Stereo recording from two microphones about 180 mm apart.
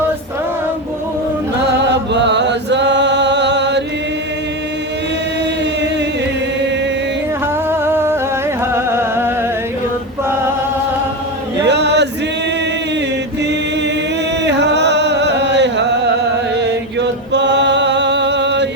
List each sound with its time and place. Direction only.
1.7 s chant: 75° right (ahead or behind)
7.7 s a sound: 15° right (ahead or behind)
8.7 s music: 15° right (ahead or behind)
11.6 s chant: 70° right (ahead or behind)
14.4 s music: 70° right (ahead or behind)
16.6 s chant: 75° right (ahead or behind)